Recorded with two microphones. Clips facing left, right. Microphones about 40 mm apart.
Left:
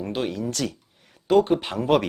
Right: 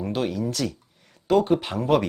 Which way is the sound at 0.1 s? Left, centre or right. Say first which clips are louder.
Right 1 dB; centre.